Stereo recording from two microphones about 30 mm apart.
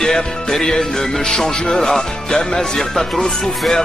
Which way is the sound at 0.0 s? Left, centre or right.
Centre.